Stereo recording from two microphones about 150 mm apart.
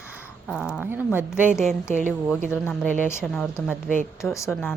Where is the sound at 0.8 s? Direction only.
15° right (ahead or behind).